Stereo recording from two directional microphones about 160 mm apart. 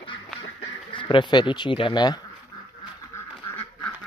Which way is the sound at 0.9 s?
30° left (ahead or behind).